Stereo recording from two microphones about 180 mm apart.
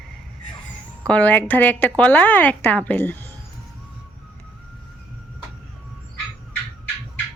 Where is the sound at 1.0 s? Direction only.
5° left (ahead or behind).